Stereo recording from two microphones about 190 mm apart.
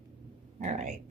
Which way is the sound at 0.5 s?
40° right (ahead or behind).